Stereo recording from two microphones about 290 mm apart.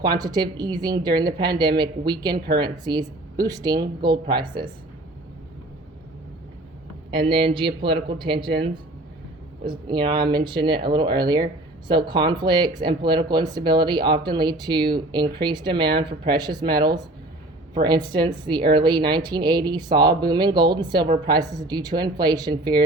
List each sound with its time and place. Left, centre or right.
0.0 s speech: centre
7.3 s speech: centre
9.8 s speech: centre